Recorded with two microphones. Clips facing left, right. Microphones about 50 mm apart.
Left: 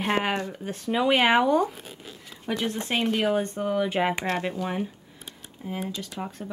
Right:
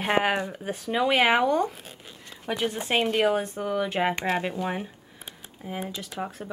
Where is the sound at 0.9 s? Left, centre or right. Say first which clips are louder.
Left 1 dB; centre.